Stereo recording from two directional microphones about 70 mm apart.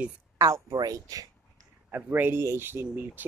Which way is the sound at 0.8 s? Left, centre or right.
Right.